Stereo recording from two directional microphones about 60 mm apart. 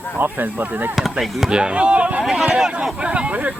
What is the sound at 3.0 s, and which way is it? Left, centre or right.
Speech, centre.